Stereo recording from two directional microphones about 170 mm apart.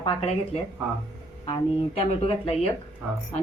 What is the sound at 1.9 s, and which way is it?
Speech, 35° left (ahead or behind).